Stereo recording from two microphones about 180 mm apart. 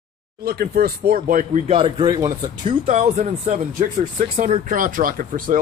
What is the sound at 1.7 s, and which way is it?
Speech, 25° right (ahead or behind).